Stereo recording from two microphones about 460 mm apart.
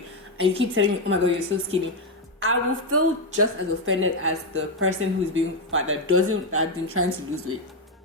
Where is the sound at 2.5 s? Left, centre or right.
Right.